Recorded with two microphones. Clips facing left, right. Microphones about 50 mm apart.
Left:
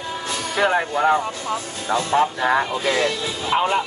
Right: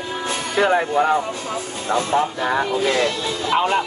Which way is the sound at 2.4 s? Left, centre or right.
Centre.